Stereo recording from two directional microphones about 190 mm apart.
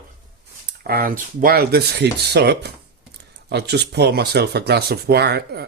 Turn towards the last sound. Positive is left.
turn(degrees=-60)  # may be behind; listen again after turning